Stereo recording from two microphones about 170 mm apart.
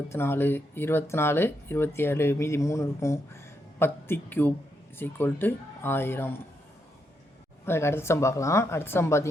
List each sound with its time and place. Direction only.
0.1 s speech: 15° left (ahead or behind)
7.6 s speech: 15° left (ahead or behind)